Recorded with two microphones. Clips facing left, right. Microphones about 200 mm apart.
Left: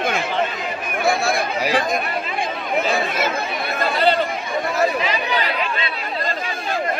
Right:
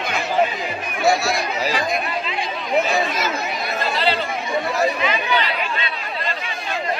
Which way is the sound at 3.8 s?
50° left (ahead or behind).